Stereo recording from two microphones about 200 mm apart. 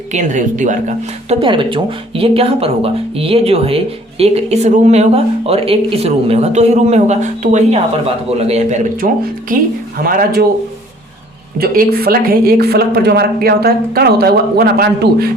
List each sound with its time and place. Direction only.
0.1 s speech: 40° right (ahead or behind)
1.4 s speech: 25° right (ahead or behind); by 10.4 s 45° right (ahead or behind)
11.6 s speech: 50° right (ahead or behind)